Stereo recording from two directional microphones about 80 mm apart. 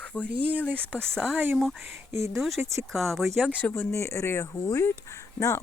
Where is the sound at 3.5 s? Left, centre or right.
Left.